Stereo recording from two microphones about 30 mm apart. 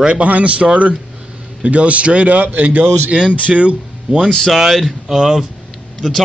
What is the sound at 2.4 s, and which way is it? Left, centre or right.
Speech, right.